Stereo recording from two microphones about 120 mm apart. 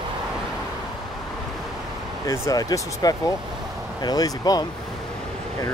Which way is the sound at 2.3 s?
30° left (ahead or behind).